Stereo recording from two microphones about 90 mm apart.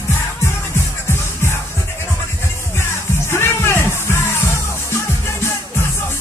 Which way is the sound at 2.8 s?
30° left (ahead or behind).